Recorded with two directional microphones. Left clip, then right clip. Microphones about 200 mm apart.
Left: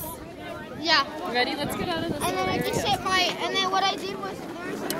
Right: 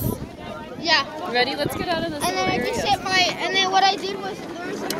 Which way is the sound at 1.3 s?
40° right (ahead or behind).